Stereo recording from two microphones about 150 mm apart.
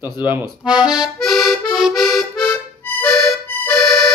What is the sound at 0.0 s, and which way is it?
Speech, 15° right (ahead or behind).